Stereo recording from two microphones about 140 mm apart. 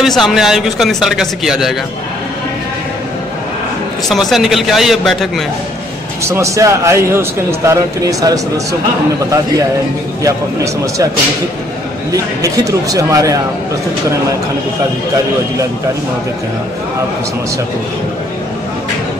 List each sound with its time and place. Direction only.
0.0 s speech: centre (ahead or behind)
4.1 s speech: centre (ahead or behind)
6.2 s a man's voice: 20° right (ahead or behind)
10.2 s a man's voice: 25° right (ahead or behind)
12.9 s a man's voice: 25° right (ahead or behind)